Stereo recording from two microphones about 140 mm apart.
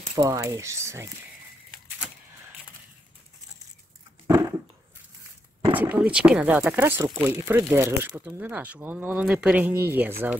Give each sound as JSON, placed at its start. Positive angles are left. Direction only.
{"t": 0.2, "sound": "speech", "side_deg": -25}
{"t": 4.3, "sound": "a sound", "side_deg": -25}
{"t": 5.8, "sound": "speech", "side_deg": -10}